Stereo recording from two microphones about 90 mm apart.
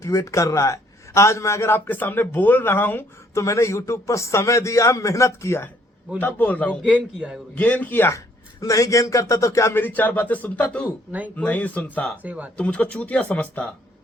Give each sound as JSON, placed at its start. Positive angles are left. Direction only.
{"t": 0.0, "sound": "a man's voice", "side_deg": 35}
{"t": 3.3, "sound": "a man's voice", "side_deg": 35}
{"t": 6.1, "sound": "a man's voice", "side_deg": 20}
{"t": 6.8, "sound": "a man's voice", "side_deg": -10}
{"t": 7.5, "sound": "a man's voice", "side_deg": 15}
{"t": 8.6, "sound": "a man's voice", "side_deg": 35}
{"t": 12.2, "sound": "a man's voice", "side_deg": -20}
{"t": 12.5, "sound": "speech", "side_deg": 15}